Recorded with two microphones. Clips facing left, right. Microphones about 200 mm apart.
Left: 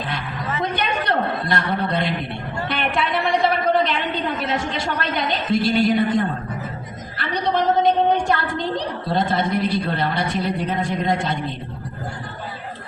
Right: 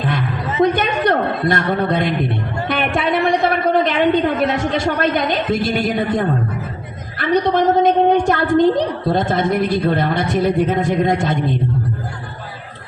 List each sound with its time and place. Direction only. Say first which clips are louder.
0.6 s a man's voice: right 10 dB; 45° right (ahead or behind)
2.6 s music: right 5 dB; 45° right (ahead or behind)
3.2 s a sound: right 3 dB; 45° right (ahead or behind)
4.4 s a woman's voice: right 6 dB; 50° right (ahead or behind)